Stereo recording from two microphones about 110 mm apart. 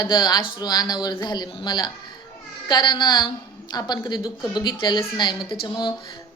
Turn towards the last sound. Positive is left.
turn(degrees=40)  # may be behind; listen again after turning